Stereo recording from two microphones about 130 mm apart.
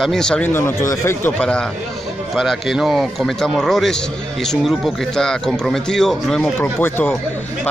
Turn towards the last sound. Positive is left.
turn(degrees=15)  # may be behind; listen again after turning